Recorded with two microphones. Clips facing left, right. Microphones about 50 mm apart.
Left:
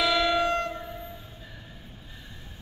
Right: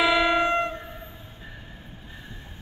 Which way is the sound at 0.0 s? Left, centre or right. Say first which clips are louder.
Right 3 dB; right.